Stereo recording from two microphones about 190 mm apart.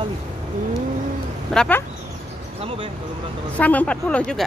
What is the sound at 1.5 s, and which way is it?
Speech, 10° left (ahead or behind).